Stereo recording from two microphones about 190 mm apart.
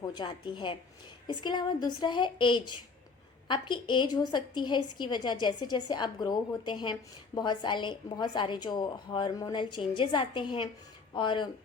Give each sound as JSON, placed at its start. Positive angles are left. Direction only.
{"t": 0.1, "sound": "a woman's voice", "side_deg": 25}